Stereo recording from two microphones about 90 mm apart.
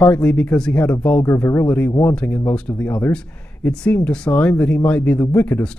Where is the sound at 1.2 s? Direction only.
25° left (ahead or behind).